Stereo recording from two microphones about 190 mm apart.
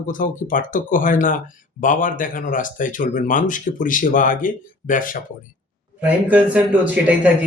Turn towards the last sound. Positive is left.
turn(degrees=-10)  # may be behind; listen again after turning